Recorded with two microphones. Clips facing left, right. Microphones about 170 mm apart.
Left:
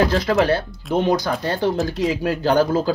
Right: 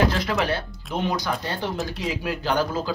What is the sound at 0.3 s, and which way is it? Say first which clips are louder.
Speech: left 7 dB; 40° left (ahead or behind).